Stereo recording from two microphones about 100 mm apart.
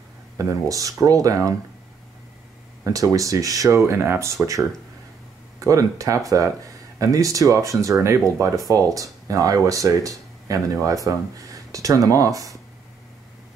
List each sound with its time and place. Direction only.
0.4 s speech: 35° right (ahead or behind)
2.8 s speech: 35° right (ahead or behind)